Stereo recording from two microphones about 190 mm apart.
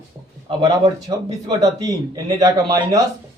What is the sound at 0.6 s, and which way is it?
Speech, 20° right (ahead or behind).